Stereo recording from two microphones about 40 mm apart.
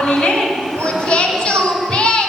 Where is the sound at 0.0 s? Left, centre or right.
Centre.